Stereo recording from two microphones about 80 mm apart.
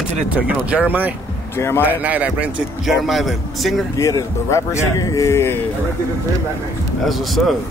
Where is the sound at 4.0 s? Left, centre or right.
Left.